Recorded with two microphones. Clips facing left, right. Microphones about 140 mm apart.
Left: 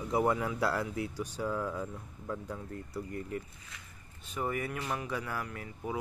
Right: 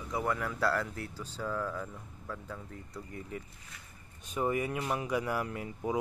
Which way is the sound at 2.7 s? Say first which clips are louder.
Left 5 dB; 5° left (ahead or behind).